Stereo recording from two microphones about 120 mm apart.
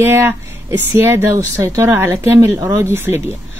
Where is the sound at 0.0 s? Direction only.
20° right (ahead or behind).